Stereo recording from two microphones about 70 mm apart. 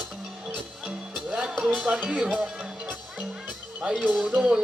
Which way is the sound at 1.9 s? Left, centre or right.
Centre.